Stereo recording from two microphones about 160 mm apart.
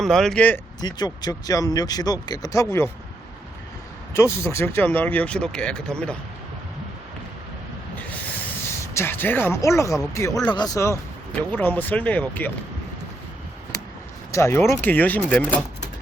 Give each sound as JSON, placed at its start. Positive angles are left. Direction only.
{"t": 0.0, "sound": "speech", "side_deg": 0}
{"t": 0.8, "sound": "speech", "side_deg": 25}
{"t": 4.1, "sound": "speech", "side_deg": 15}
{"t": 9.0, "sound": "speech", "side_deg": 15}
{"t": 13.7, "sound": "a sound", "side_deg": 20}
{"t": 14.3, "sound": "speech", "side_deg": 15}